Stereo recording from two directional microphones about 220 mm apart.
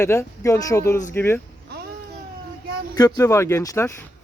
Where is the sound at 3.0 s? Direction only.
15° left (ahead or behind).